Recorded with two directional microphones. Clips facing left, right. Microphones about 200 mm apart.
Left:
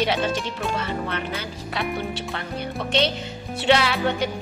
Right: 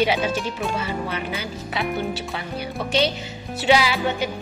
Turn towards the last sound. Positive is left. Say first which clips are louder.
# even
turn(degrees=-5)  # may be behind; listen again after turning